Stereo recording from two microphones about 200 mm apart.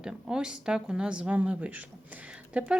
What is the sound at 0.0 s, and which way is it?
Speech, 5° right (ahead or behind).